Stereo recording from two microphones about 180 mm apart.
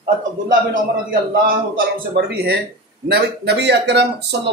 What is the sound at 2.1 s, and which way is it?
Speech, 60° right (ahead or behind).